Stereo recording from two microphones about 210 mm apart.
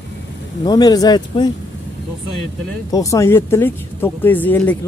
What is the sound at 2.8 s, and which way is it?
Speech, 15° left (ahead or behind).